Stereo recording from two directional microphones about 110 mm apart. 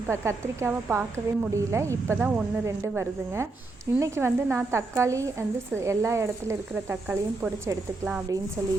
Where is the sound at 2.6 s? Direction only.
25° right (ahead or behind).